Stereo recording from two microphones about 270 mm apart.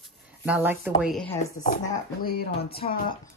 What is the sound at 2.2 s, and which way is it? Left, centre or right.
Speech, left.